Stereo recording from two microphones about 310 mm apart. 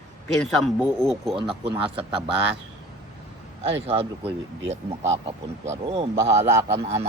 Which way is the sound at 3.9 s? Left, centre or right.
Centre.